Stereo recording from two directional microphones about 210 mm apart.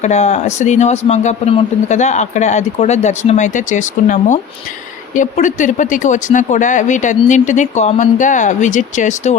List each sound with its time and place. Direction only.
0.0 s speech: 30° left (ahead or behind)